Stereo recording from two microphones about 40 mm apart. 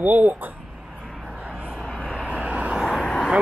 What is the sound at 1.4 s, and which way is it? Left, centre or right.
Vehicle, right.